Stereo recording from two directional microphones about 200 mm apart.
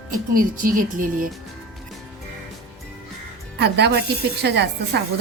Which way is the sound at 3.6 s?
55° right (ahead or behind).